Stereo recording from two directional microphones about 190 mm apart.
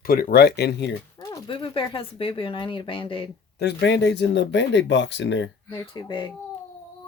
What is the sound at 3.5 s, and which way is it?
Speech, 60° left (ahead or behind).